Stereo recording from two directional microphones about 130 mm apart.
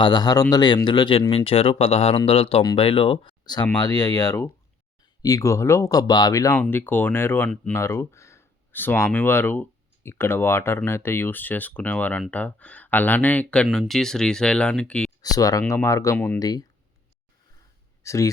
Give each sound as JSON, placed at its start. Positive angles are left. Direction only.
{"t": 0.0, "sound": "speech", "side_deg": 35}
{"t": 6.6, "sound": "speech", "side_deg": 15}
{"t": 15.2, "sound": "speech", "side_deg": 25}
{"t": 16.1, "sound": "speech", "side_deg": 10}
{"t": 16.4, "sound": "speech", "side_deg": 30}
{"t": 18.0, "sound": "speech", "side_deg": 25}